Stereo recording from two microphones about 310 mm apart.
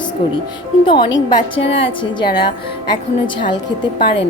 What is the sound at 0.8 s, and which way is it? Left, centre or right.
Speech, centre.